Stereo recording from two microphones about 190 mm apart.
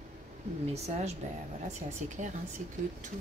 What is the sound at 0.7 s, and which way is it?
Speech, 35° right (ahead or behind).